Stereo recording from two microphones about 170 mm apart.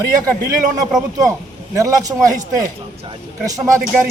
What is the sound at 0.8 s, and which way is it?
Speech, 20° right (ahead or behind).